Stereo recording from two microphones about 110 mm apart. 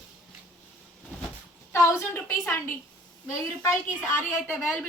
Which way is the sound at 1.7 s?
25° left (ahead or behind).